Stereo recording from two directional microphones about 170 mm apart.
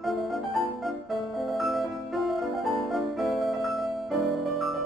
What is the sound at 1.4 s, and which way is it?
Music, centre (ahead or behind).